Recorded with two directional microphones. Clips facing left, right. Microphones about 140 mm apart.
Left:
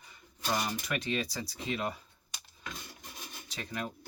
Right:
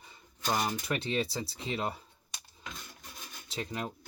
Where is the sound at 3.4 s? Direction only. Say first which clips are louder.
Right 2 dB; 25° right (ahead or behind).